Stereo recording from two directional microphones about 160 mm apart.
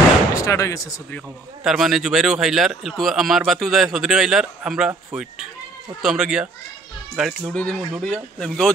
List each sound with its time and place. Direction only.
0.3 s speech: 20° left (ahead or behind)
1.6 s speech: centre (ahead or behind)
7.5 s speech: 5° left (ahead or behind)